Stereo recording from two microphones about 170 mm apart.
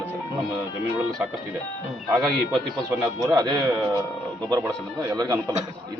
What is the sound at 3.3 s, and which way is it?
Speech, 25° right (ahead or behind).